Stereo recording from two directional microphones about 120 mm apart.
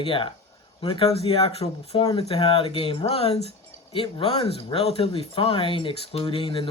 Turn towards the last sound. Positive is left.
turn(degrees=45)  # may be behind; listen again after turning